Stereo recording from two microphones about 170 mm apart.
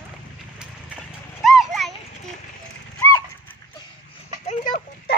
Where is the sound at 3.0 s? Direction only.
15° left (ahead or behind).